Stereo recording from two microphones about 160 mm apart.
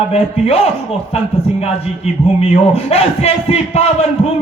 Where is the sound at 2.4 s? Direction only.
40° left (ahead or behind).